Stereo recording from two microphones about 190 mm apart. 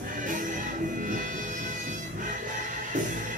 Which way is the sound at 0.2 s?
45° right (ahead or behind).